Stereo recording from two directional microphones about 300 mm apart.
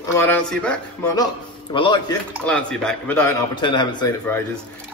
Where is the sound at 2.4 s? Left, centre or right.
Centre.